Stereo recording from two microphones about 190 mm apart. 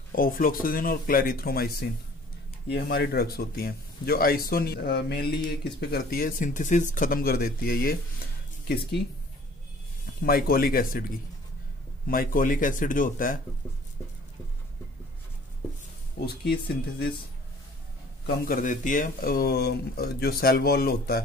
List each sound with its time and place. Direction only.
0.1 s speech: 50° left (ahead or behind)
10.2 s speech: 50° left (ahead or behind)
12.1 s speech: 45° left (ahead or behind)
16.2 s speech: 55° left (ahead or behind)
18.2 s speech: 50° left (ahead or behind)